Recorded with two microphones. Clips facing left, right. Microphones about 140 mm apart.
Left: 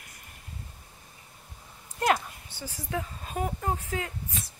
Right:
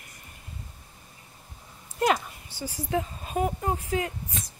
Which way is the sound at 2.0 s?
Centre (ahead or behind).